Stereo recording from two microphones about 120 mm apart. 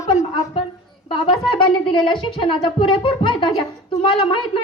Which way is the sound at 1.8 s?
45° left (ahead or behind).